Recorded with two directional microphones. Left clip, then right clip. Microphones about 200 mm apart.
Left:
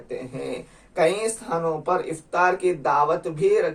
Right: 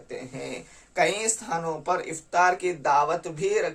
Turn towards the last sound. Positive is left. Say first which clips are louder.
# left 5 dB
turn(degrees=-25)  # may be behind; listen again after turning